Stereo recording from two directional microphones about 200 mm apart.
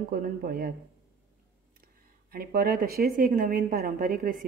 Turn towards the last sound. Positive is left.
turn(degrees=-45)  # may be behind; listen again after turning